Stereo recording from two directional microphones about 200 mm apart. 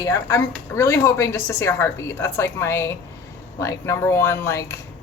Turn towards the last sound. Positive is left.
turn(degrees=15)  # may be behind; listen again after turning